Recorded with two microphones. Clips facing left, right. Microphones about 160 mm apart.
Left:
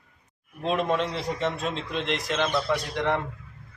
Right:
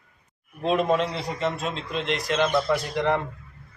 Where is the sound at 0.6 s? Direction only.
Centre (ahead or behind).